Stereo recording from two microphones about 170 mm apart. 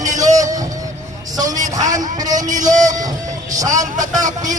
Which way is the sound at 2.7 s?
45° right (ahead or behind).